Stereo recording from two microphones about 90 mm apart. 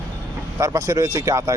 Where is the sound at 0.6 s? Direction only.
40° right (ahead or behind).